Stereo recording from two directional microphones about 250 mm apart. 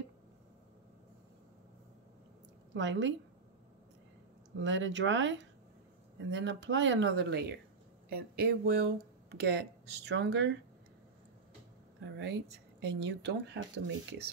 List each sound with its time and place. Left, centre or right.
2.7 s speech: right
4.6 s speech: right
12.8 s speech: right